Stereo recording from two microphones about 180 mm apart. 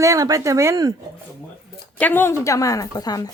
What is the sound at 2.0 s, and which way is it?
A woman's voice, 10° left (ahead or behind).